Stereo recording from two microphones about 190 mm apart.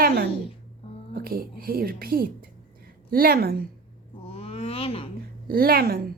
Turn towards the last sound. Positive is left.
turn(degrees=-55)  # may be behind; listen again after turning